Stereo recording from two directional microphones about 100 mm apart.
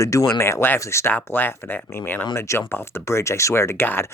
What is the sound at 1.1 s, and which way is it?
Speech, 20° left (ahead or behind).